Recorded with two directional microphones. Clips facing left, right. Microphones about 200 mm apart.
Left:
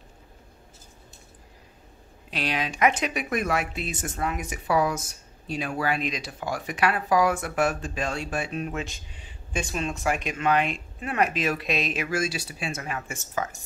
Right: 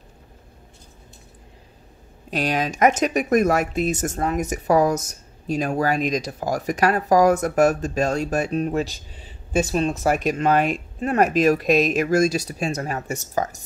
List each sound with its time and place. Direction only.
2.3 s speech: 45° right (ahead or behind)